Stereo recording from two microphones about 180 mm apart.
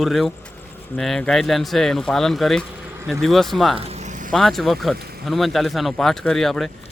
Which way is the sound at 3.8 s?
35° right (ahead or behind).